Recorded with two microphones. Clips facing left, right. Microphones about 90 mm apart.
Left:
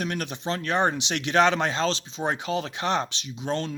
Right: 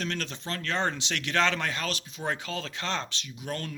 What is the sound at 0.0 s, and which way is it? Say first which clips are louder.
Speech: left 4 dB; 15° left (ahead or behind).